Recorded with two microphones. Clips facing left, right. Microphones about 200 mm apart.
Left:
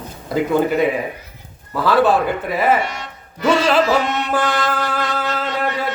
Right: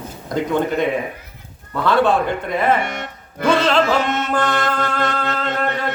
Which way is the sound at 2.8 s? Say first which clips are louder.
Right 2 dB; 55° right (ahead or behind).